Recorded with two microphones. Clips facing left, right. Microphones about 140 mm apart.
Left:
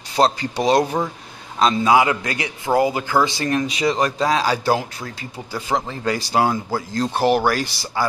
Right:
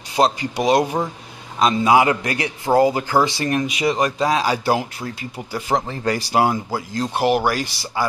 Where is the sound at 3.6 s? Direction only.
30° left (ahead or behind).